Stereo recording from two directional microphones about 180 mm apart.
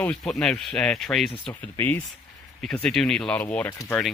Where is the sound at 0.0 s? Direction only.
5° left (ahead or behind).